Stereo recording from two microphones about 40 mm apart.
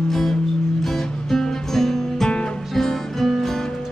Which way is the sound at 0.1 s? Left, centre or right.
Centre.